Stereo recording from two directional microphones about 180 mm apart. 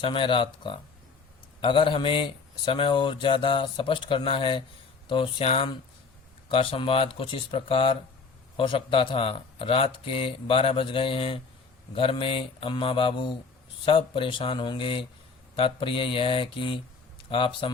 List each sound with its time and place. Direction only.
0.0 s speech: 30° left (ahead or behind)